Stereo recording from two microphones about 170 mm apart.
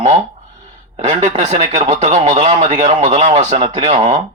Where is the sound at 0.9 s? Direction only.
35° right (ahead or behind).